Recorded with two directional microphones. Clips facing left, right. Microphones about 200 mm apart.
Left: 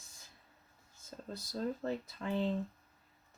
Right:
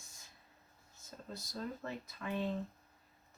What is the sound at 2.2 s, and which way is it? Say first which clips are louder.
Speech: left 2 dB; 30° left (ahead or behind).